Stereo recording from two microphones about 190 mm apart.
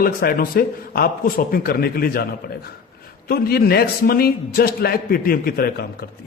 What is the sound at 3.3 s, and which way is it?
A man's voice, 55° left (ahead or behind).